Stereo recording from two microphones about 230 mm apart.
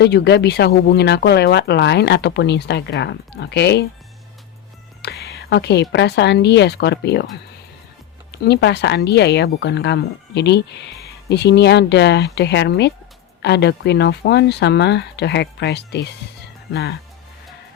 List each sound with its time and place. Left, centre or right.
0.0 s speech: left
5.0 s a sound: left
5.9 s speech: left
8.3 s speech: left